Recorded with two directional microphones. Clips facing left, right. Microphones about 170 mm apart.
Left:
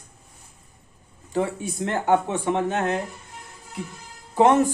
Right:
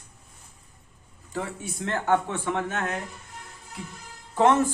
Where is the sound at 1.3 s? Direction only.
20° left (ahead or behind).